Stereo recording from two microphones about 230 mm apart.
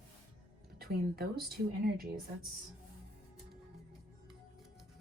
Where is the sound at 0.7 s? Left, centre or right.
Right.